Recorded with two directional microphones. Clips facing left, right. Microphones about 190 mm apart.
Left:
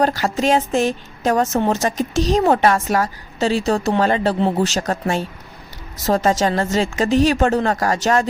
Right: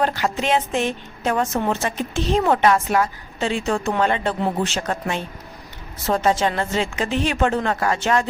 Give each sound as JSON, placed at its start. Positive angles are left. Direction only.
{"t": 0.0, "sound": "a woman's voice", "side_deg": 40}